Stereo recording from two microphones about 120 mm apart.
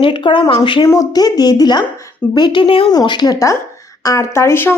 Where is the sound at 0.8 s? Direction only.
30° left (ahead or behind); by 2.9 s 45° left (ahead or behind).